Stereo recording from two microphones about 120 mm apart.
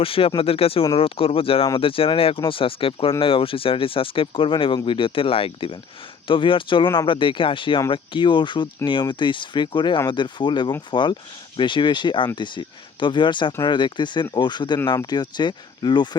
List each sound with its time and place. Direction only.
0.0 s speech: 50° left (ahead or behind)